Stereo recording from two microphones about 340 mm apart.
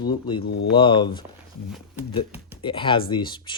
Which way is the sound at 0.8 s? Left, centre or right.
Centre.